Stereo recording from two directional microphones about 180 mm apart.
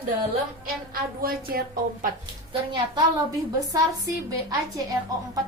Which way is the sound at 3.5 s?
20° right (ahead or behind).